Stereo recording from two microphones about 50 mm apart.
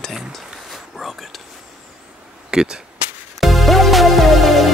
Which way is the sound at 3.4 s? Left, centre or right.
Centre.